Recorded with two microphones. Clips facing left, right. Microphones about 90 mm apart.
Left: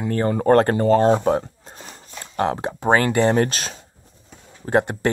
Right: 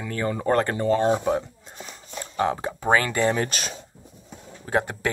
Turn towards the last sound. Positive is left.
turn(degrees=40)  # may be behind; listen again after turning